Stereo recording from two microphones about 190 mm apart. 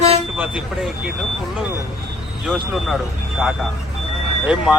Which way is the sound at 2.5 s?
Centre (ahead or behind).